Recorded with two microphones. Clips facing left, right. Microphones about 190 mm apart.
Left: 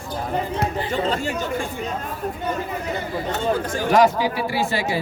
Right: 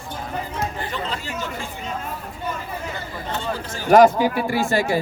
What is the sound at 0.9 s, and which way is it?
Chatter, 45° left (ahead or behind).